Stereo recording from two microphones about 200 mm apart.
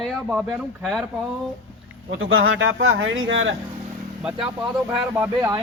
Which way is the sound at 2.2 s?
75° right (ahead or behind).